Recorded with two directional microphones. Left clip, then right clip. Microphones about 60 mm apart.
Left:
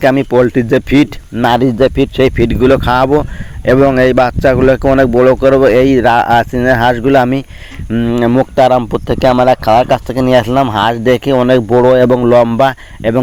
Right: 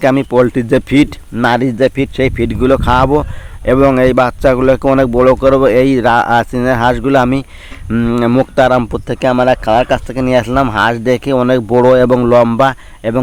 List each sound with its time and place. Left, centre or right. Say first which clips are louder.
0.0 s speech: left 1 dB; centre
6.4 s speech: left 2 dB; centre
7.9 s speech: even; right
8.5 s speech: left 2 dB; centre
9.0 s speech: left 3 dB; left
10.2 s speech: left 2 dB; left
11.0 s speech: left 3 dB; centre
11.3 s speech: even; centre
12.5 s speech: left 1 dB; left